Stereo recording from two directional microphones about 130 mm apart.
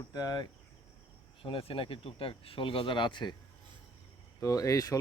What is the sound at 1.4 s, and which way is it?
Speech, 45° left (ahead or behind).